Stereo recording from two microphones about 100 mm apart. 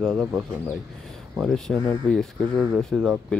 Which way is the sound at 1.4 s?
5° left (ahead or behind).